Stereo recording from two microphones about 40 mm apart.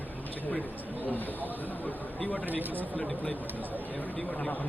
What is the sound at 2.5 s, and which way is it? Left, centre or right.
Speech, right.